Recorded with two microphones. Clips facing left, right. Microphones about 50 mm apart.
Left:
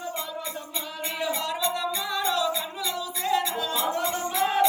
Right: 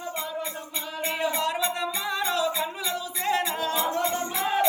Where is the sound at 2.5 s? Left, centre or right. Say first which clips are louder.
Even; right.